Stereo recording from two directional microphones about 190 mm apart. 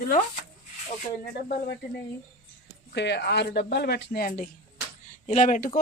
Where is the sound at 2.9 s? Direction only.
65° left (ahead or behind); by 5.8 s 40° left (ahead or behind).